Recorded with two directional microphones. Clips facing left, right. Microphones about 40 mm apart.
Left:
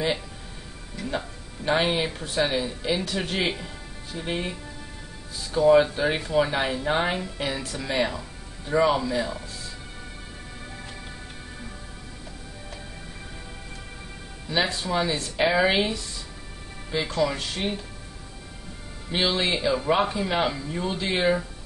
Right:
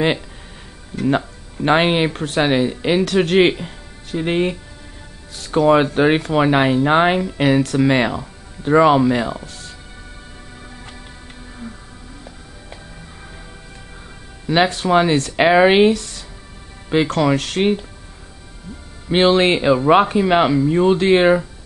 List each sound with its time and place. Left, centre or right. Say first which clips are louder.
0.9 s speech: right 12 dB; right
14.5 s speech: right 10 dB; right
19.0 s speech: right 11 dB; right